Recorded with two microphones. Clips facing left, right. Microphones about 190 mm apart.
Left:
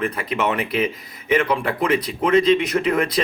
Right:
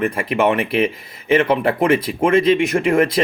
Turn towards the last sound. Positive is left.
turn(degrees=-25)  # may be behind; listen again after turning